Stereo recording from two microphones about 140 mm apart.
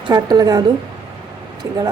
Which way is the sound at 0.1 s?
30° right (ahead or behind).